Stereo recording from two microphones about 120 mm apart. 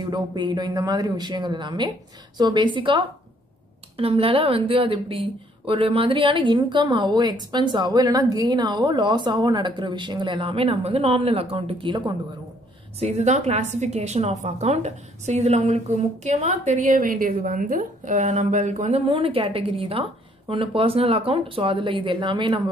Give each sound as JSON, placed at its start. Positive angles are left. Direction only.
{"t": 0.0, "sound": "a woman's voice", "side_deg": -35}
{"t": 13.0, "sound": "a woman's voice", "side_deg": -65}
{"t": 18.0, "sound": "a woman's voice", "side_deg": -75}
{"t": 19.0, "sound": "speech", "side_deg": -50}